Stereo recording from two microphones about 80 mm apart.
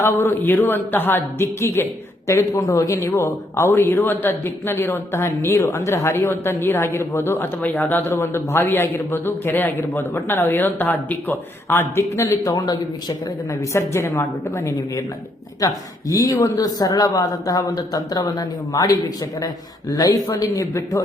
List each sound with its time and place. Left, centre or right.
0.0 s a man's voice: left
12.1 s a woman's voice: left
12.5 s a man's voice: left
13.5 s a woman's voice: left
20.3 s a woman's voice: left